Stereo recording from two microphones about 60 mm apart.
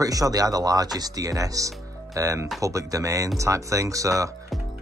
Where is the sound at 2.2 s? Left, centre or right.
Right.